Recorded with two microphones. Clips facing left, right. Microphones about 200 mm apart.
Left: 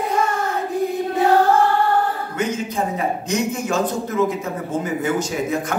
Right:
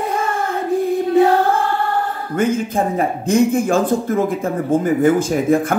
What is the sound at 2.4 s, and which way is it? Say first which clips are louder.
A man's voice: right 7 dB; 50° right (ahead or behind).